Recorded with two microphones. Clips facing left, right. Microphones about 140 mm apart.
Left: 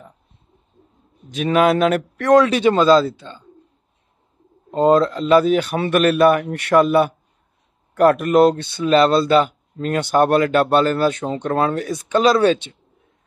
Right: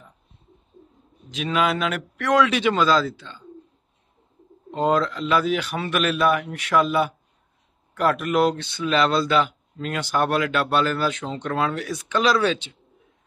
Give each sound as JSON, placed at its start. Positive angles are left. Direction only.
{"t": 1.3, "sound": "speech", "side_deg": 50}
{"t": 4.6, "sound": "speech", "side_deg": 40}